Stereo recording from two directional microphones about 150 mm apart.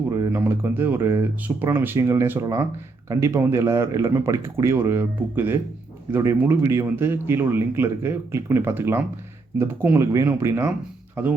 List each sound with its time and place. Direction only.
0.1 s speech: 20° right (ahead or behind)